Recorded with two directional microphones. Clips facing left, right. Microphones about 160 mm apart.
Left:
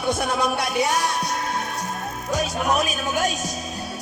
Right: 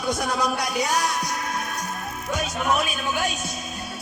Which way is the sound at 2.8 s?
40° left (ahead or behind).